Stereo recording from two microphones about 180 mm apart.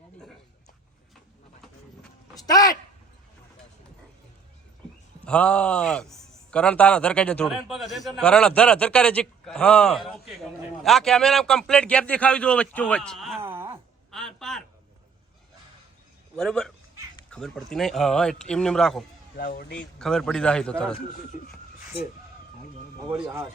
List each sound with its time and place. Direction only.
2.5 s speech: 20° left (ahead or behind)
5.2 s a man's voice: 5° left (ahead or behind)
13.4 s wail: 15° right (ahead or behind)
14.1 s a sound: centre (ahead or behind)
16.3 s a man's voice: 5° left (ahead or behind)
19.4 s speech: 60° left (ahead or behind)
19.7 s a man's voice: 5° left (ahead or behind)
23.1 s speech: 15° right (ahead or behind)